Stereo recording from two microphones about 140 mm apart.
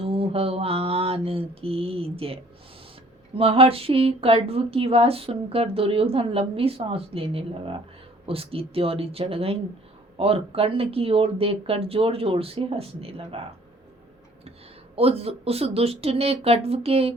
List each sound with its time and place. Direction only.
0.0 s mantra: 45° right (ahead or behind)
3.3 s speech: 40° right (ahead or behind)
14.9 s speech: 45° right (ahead or behind)